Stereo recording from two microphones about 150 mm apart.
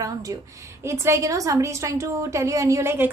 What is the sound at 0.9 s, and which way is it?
A woman's voice, 20° right (ahead or behind).